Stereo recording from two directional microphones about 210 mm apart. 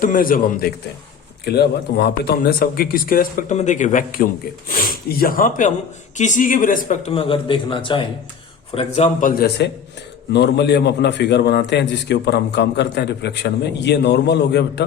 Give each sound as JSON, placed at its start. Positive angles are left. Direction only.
{"t": 0.0, "sound": "a man's voice", "side_deg": 40}
{"t": 10.3, "sound": "a man's voice", "side_deg": 55}